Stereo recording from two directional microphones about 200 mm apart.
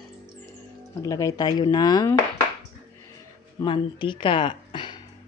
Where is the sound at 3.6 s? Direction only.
25° left (ahead or behind).